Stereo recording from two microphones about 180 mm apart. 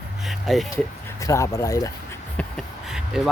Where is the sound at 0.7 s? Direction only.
20° left (ahead or behind).